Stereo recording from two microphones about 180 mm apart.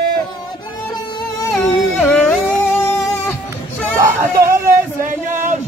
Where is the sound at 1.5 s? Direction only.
5° left (ahead or behind).